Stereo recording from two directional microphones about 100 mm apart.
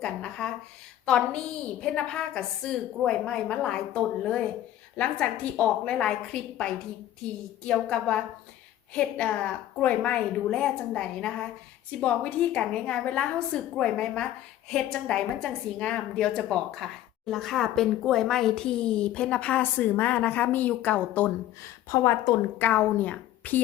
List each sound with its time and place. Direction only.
0.0 s speech: 5° left (ahead or behind)
21.6 s a woman's voice: 30° left (ahead or behind)
22.5 s speech: 15° left (ahead or behind)